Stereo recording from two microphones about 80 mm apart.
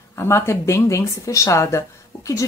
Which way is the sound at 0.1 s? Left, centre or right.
Left.